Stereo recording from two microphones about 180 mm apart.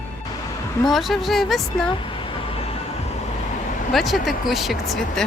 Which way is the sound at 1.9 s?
30° left (ahead or behind).